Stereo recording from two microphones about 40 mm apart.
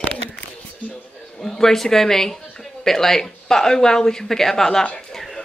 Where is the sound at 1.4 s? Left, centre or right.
Centre.